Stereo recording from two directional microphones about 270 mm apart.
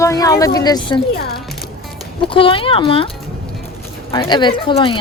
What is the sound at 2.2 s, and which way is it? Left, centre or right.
Speech, centre.